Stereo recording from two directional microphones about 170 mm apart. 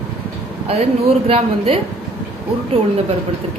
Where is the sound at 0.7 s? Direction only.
35° right (ahead or behind).